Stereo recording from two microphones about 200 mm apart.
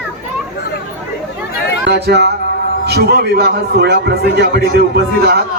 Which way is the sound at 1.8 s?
55° right (ahead or behind).